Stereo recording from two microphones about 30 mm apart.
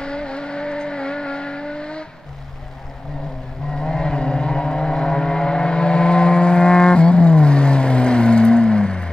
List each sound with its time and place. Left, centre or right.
0.0 s vehicle: left
3.7 s vehicle: left